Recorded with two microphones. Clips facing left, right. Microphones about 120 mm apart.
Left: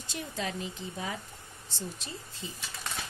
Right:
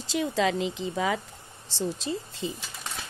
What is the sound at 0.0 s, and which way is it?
Speech, 90° right.